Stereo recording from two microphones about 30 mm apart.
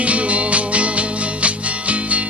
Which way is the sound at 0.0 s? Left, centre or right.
Right.